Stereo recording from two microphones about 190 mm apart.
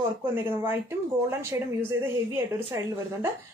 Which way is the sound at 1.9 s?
10° right (ahead or behind).